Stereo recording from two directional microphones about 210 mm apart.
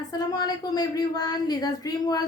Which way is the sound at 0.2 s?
20° left (ahead or behind).